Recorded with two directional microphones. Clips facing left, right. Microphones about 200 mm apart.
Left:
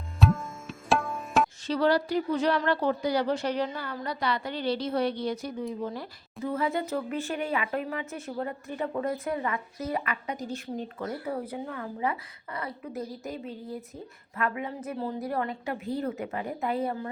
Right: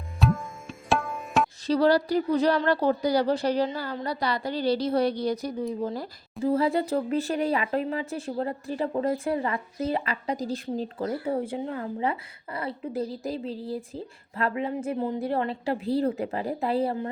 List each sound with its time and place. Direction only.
0.2 s tabla: centre (ahead or behind)
1.6 s speech: 35° right (ahead or behind)